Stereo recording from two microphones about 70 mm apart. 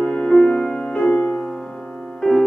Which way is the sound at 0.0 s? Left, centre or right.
Centre.